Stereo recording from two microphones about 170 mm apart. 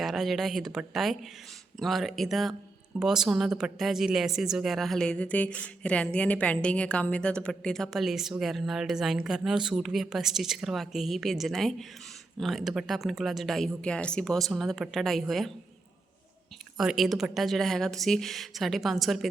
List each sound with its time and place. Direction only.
0.0 s speech: centre (ahead or behind)
16.7 s speech: centre (ahead or behind)